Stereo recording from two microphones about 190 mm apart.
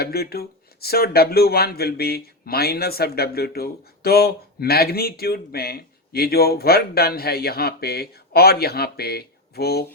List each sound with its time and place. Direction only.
0.0 s speech: 55° left (ahead or behind)